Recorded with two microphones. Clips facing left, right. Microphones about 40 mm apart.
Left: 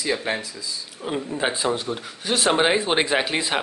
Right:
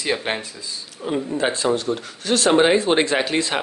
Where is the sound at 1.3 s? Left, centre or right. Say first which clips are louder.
Right 3 dB; centre.